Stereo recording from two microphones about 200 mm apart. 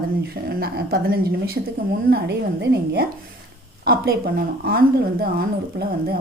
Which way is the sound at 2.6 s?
50° right (ahead or behind).